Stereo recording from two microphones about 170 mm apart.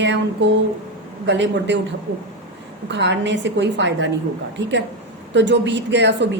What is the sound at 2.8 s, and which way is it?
A woman's voice, 90° right.